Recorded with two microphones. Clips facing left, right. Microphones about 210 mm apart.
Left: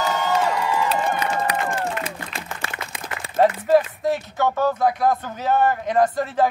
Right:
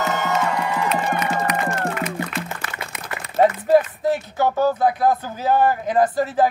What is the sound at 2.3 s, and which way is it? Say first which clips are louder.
Applause: right 3 dB; 30° left (ahead or behind).